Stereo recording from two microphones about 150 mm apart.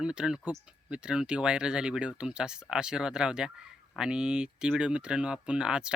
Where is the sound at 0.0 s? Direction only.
5° right (ahead or behind).